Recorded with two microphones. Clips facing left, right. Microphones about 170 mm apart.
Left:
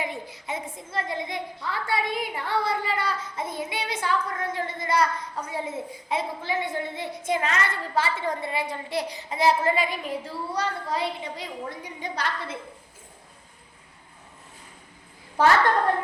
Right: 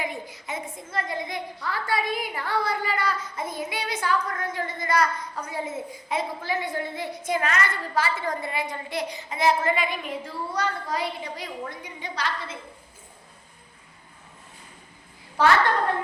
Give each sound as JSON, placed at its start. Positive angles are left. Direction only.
{"t": 0.0, "sound": "a woman's voice", "side_deg": 30}
{"t": 11.8, "sound": "a woman's voice", "side_deg": 45}
{"t": 15.4, "sound": "a woman's voice", "side_deg": 45}